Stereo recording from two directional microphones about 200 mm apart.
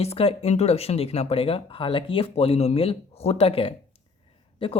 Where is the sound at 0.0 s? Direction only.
30° left (ahead or behind).